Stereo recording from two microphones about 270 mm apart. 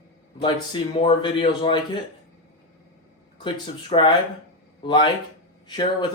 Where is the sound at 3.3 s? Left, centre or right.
Centre.